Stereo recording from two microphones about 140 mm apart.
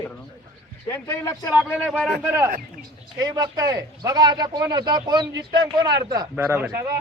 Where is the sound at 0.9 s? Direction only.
20° left (ahead or behind).